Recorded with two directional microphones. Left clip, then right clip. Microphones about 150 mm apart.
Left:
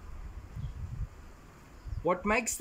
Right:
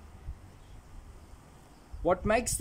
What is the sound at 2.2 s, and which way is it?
Speech, 25° right (ahead or behind).